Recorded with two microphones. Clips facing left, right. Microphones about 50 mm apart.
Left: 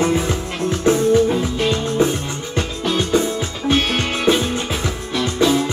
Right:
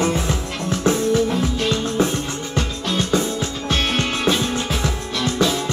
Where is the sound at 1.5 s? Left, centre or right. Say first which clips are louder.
Left 1 dB; centre.